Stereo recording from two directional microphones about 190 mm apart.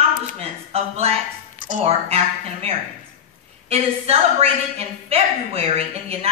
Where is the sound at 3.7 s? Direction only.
30° right (ahead or behind).